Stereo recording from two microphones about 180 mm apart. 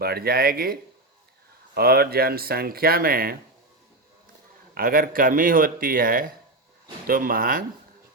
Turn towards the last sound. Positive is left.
turn(degrees=-50)  # may be behind; listen again after turning